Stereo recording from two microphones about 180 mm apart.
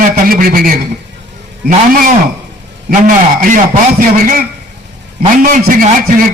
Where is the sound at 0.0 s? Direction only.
50° right (ahead or behind).